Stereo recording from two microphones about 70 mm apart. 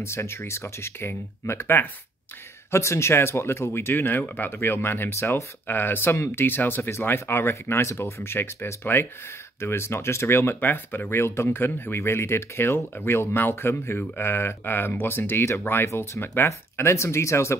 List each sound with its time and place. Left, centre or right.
0.0 s speech: left